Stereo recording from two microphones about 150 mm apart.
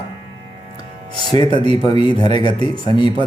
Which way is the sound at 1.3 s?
30° left (ahead or behind).